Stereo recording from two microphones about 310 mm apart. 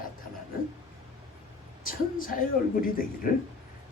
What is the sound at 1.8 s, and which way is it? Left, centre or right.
Speech, left.